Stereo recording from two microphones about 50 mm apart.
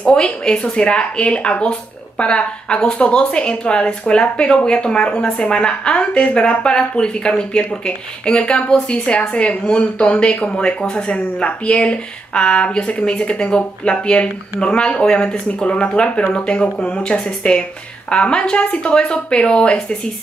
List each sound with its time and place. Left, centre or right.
0.0 s speech: left